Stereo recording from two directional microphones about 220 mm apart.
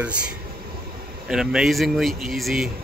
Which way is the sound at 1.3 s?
Centre (ahead or behind).